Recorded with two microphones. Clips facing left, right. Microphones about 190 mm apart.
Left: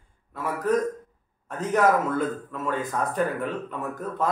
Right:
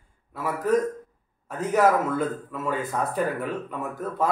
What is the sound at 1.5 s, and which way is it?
A man's voice, 5° right (ahead or behind).